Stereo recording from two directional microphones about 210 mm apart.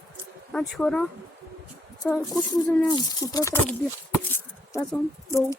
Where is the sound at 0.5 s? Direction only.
5° left (ahead or behind).